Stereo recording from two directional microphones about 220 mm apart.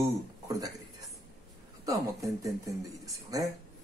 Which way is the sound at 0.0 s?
15° right (ahead or behind).